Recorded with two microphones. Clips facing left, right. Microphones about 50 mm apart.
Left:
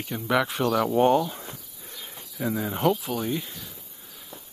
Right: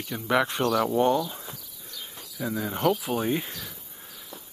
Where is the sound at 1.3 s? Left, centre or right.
Left.